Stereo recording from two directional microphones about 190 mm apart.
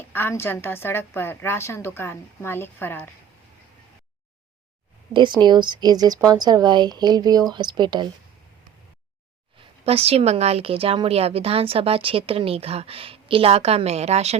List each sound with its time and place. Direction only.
0.0 s a woman's voice: 10° left (ahead or behind)
5.1 s speech: 25° right (ahead or behind)
9.8 s a woman's voice: 30° right (ahead or behind)